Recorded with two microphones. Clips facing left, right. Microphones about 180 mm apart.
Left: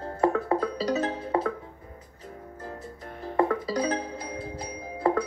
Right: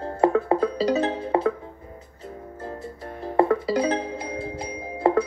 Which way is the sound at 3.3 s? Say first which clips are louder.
Right 5 dB; 30° right (ahead or behind).